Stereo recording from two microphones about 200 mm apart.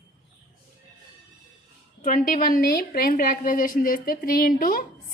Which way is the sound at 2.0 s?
40° left (ahead or behind).